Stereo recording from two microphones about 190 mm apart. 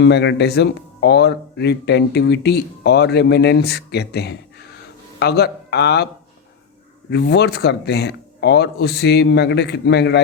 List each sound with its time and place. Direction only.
0.0 s speech: 65° left (ahead or behind)
7.1 s speech: 65° left (ahead or behind)